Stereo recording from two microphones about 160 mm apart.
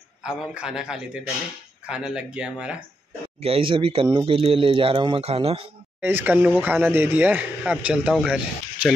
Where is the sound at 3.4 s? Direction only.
35° right (ahead or behind).